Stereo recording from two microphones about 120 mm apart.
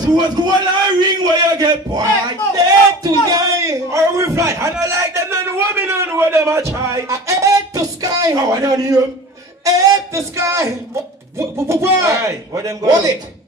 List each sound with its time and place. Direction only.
0.0 s a man's voice: 35° right (ahead or behind)
2.5 s a sound: 30° right (ahead or behind)
9.7 s a man's voice: 30° right (ahead or behind)